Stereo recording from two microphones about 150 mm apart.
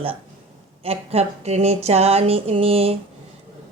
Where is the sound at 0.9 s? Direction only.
45° right (ahead or behind).